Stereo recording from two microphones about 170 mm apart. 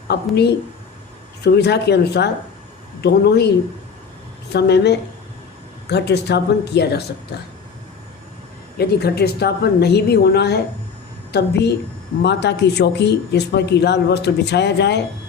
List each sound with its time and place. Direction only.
0.1 s a woman's voice: 75° left (ahead or behind)
1.5 s a woman's voice: 80° left
4.5 s a woman's voice: 80° left
8.8 s a woman's voice: 70° left (ahead or behind)